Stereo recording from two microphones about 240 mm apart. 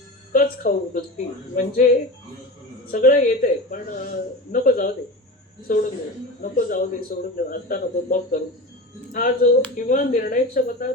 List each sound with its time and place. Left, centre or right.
0.3 s a man's voice: left